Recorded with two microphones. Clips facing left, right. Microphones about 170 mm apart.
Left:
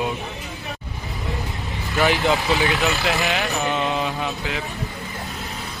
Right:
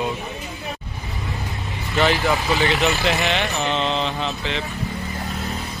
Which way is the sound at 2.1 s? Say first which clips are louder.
Left 1 dB; 20° left (ahead or behind).